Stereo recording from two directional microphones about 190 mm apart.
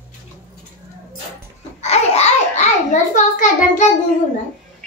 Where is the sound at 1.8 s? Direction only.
35° left (ahead or behind).